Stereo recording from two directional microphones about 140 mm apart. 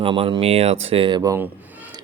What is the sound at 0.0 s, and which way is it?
Speech, 40° right (ahead or behind).